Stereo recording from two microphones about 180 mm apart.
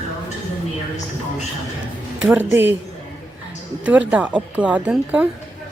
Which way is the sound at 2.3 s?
10° right (ahead or behind).